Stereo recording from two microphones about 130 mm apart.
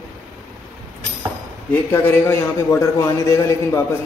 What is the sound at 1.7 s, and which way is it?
A man's voice, 15° left (ahead or behind).